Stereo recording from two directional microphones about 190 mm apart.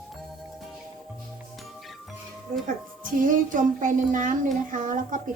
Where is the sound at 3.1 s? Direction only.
45° right (ahead or behind).